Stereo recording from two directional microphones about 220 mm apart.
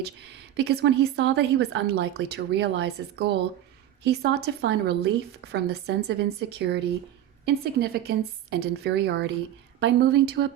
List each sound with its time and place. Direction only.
0.5 s speech: 50° right (ahead or behind)